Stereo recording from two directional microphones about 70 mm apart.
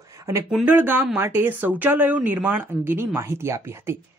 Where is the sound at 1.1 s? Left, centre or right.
Right.